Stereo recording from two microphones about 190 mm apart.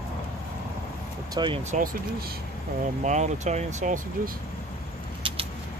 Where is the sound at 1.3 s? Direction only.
25° right (ahead or behind).